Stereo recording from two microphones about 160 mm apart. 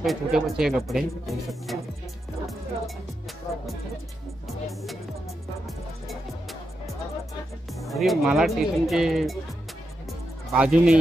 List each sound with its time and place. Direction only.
0.0 s speech: centre (ahead or behind)
7.8 s speech: centre (ahead or behind)
10.5 s speech: 5° right (ahead or behind)